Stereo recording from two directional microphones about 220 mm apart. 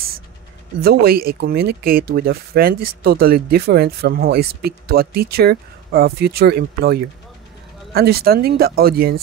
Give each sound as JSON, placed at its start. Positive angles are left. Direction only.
{"t": 0.7, "sound": "speech", "side_deg": -45}